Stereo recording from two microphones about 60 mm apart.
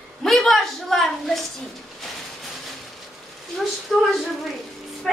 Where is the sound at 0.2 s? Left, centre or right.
Centre.